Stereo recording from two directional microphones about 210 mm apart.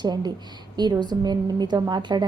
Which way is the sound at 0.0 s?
20° right (ahead or behind).